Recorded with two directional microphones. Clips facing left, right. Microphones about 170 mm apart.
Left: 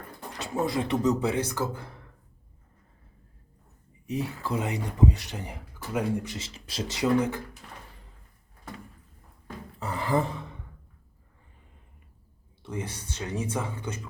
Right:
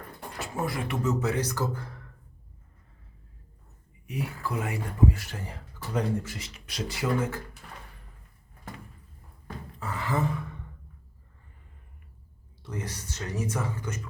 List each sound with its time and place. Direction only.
0.3 s a sound: 20° left (ahead or behind)
0.9 s speech: 30° left (ahead or behind)
4.0 s speech: 25° left (ahead or behind)
6.2 s speech: 25° left (ahead or behind)
9.8 s gasp: 30° left (ahead or behind)
12.6 s speech: 30° left (ahead or behind)
13.9 s speech: 10° left (ahead or behind)